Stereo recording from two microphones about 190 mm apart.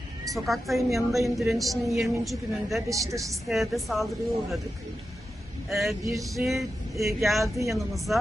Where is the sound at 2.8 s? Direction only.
15° right (ahead or behind).